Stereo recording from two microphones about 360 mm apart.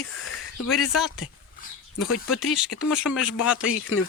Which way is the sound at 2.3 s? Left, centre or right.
Centre.